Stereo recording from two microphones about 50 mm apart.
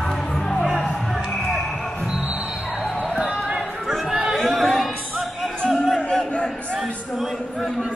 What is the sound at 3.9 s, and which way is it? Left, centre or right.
Chatter, centre.